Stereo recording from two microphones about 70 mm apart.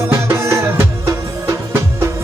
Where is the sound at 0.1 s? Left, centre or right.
Right.